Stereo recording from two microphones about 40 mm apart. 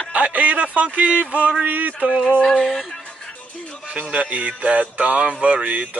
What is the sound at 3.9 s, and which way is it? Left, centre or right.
Speech, right.